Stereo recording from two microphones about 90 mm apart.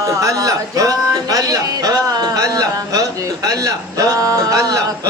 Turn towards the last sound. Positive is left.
turn(degrees=-40)  # may be behind; listen again after turning